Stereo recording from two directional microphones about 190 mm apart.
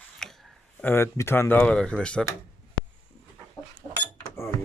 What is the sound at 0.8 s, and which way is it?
Speech, 10° left (ahead or behind).